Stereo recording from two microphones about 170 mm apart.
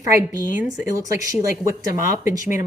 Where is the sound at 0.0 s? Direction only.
20° right (ahead or behind).